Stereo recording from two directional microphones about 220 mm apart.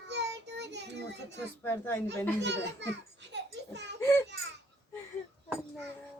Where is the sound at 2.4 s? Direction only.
50° right (ahead or behind).